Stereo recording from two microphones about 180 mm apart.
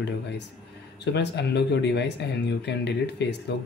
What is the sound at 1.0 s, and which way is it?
Speech, 75° left (ahead or behind).